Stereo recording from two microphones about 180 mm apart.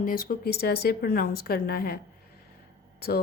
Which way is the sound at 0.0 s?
50° left (ahead or behind).